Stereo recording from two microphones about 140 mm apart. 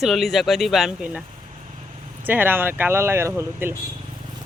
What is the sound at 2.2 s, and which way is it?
Speech, 15° right (ahead or behind).